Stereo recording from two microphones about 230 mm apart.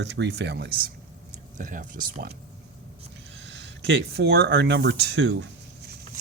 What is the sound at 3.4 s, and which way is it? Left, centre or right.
Speech, right.